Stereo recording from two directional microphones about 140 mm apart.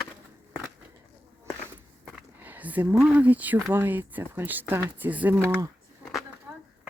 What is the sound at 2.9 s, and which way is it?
Speech, 10° right (ahead or behind).